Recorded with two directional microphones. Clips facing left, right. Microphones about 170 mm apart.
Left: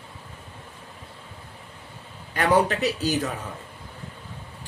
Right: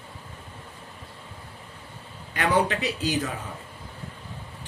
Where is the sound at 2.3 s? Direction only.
40° left (ahead or behind).